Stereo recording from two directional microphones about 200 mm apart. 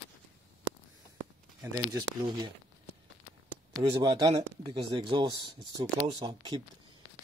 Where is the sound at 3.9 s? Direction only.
20° right (ahead or behind).